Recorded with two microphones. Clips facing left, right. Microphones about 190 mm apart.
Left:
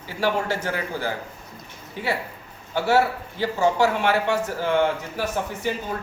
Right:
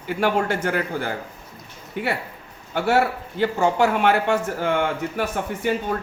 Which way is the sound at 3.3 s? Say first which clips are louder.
Right 1 dB; 55° right (ahead or behind).